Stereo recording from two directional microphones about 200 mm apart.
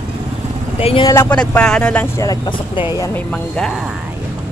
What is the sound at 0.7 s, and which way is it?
Speech, 30° left (ahead or behind).